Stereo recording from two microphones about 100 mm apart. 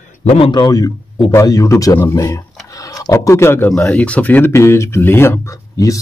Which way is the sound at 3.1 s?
30° left (ahead or behind).